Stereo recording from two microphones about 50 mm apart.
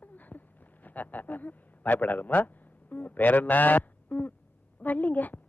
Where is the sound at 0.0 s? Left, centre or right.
Left.